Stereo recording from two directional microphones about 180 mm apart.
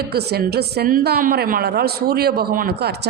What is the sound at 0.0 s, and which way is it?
A woman's voice, 65° right (ahead or behind).